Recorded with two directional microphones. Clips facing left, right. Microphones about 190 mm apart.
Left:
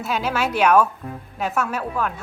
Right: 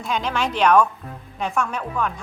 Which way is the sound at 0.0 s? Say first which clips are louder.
Left 1 dB; 5° left (ahead or behind).